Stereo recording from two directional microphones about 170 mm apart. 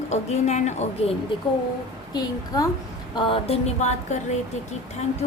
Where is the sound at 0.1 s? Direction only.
40° left (ahead or behind).